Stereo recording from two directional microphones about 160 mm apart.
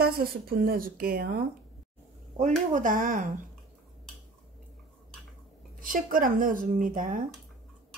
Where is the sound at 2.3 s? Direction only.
50° right (ahead or behind).